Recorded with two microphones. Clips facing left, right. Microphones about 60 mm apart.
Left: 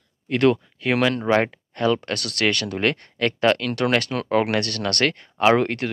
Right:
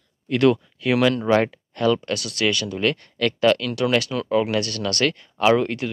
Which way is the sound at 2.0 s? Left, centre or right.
Left.